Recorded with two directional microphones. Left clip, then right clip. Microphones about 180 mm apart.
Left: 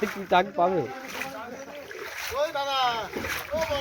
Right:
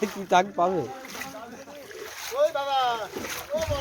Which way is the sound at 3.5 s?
30° left (ahead or behind).